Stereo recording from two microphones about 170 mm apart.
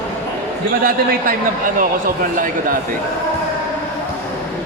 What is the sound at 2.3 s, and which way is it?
Speech, 50° right (ahead or behind).